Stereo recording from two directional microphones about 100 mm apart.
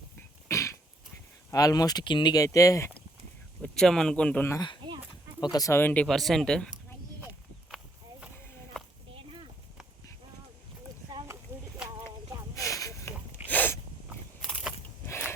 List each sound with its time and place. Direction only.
0.2 s cough: 30° left (ahead or behind)
1.5 s speech: 35° left (ahead or behind)
2.4 s speech: 35° left (ahead or behind)
3.6 s speech: 5° left (ahead or behind)
5.4 s speech: 40° left (ahead or behind)
5.7 s speech: 15° left (ahead or behind)
6.1 s speech: centre (ahead or behind)
8.7 s a sound: 5° left (ahead or behind)
11.5 s a sound: 25° right (ahead or behind)
12.5 s a sound: 35° left (ahead or behind)
13.5 s a sound: 15° left (ahead or behind)
14.1 s biting: 10° right (ahead or behind)